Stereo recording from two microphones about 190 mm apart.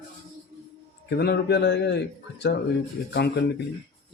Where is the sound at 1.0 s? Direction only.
60° left (ahead or behind).